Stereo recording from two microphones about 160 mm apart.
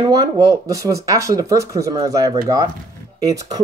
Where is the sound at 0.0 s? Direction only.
25° right (ahead or behind).